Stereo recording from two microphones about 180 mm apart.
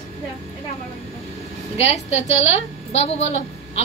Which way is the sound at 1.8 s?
35° left (ahead or behind).